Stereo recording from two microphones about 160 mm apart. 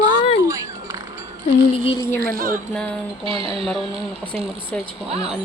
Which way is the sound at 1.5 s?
35° left (ahead or behind).